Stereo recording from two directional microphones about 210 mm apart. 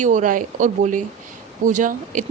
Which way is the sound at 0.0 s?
35° right (ahead or behind).